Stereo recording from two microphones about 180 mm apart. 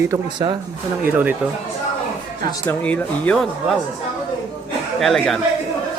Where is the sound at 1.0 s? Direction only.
10° right (ahead or behind).